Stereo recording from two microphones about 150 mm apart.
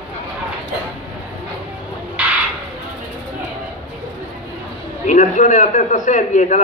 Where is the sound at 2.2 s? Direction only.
10° right (ahead or behind).